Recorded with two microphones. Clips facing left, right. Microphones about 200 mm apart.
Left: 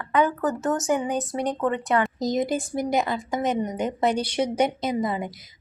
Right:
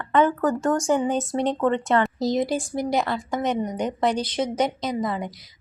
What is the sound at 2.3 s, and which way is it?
Speech, 45° left (ahead or behind).